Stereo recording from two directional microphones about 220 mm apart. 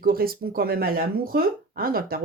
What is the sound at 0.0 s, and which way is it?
Speech, 40° right (ahead or behind).